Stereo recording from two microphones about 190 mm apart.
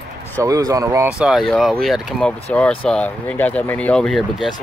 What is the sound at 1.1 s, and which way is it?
Speech, 5° right (ahead or behind).